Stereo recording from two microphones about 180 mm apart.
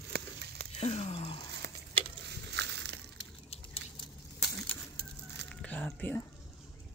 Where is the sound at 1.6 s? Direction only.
65° right (ahead or behind).